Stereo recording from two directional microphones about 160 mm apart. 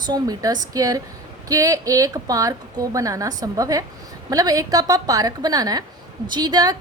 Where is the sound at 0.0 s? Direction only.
25° right (ahead or behind).